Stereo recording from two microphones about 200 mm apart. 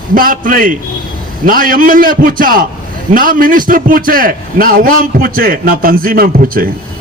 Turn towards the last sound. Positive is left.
turn(degrees=-45)  # may be behind; listen again after turning